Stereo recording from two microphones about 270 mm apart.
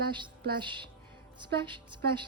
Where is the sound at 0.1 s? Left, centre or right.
Centre.